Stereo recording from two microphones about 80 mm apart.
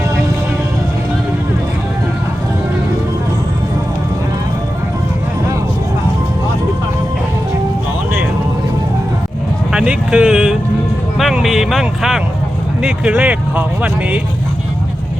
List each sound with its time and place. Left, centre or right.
9.7 s vehicle: centre
11.2 s speech: centre
12.8 s speech: centre